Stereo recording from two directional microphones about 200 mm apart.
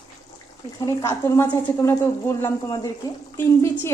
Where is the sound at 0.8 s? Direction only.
15° left (ahead or behind).